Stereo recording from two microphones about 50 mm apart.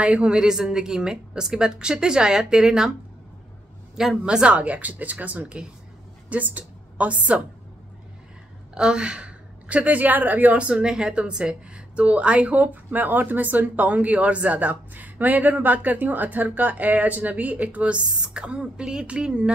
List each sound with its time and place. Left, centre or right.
0.0 s a woman's voice: right
3.9 s speech: centre
4.3 s a woman's voice: right
8.7 s a woman's voice: centre; by 10.7 s right
10.7 s a woman's voice: centre